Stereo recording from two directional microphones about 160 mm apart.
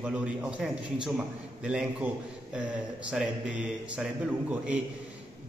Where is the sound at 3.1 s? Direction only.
5° right (ahead or behind).